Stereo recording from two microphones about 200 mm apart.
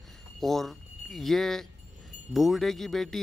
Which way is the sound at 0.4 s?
Centre (ahead or behind).